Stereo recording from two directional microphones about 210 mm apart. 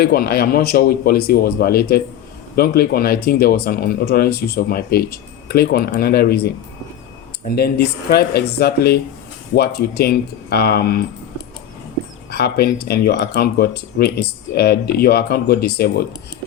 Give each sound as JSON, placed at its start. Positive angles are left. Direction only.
{"t": 0.0, "sound": "speech", "side_deg": 45}
{"t": 12.3, "sound": "speech", "side_deg": 50}